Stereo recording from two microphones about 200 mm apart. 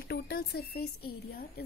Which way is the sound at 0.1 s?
50° left (ahead or behind).